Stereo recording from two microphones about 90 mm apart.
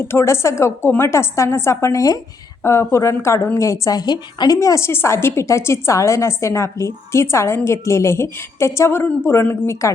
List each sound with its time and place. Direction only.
0.0 s a woman's voice: 30° left (ahead or behind); by 4.5 s 50° left (ahead or behind)
4.5 s a woman's voice: 35° left (ahead or behind)